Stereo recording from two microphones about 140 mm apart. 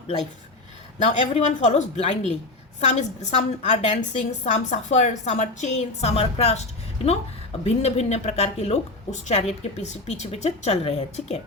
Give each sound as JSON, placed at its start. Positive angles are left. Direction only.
{"t": 0.9, "sound": "a woman's voice", "side_deg": 55}